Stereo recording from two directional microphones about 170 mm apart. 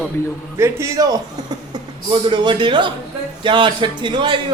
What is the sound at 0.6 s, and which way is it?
A man's voice, 15° right (ahead or behind).